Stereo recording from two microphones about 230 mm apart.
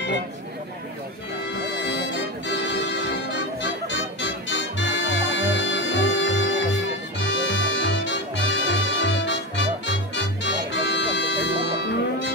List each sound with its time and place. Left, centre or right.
1.8 s music: left